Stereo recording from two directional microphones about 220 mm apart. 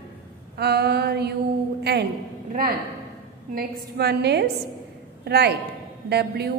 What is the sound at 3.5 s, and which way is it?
A woman's voice, 45° right (ahead or behind).